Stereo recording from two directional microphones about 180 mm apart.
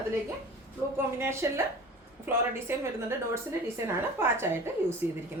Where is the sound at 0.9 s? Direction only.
15° right (ahead or behind).